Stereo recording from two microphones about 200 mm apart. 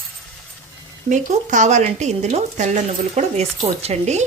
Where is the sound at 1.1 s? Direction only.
40° right (ahead or behind).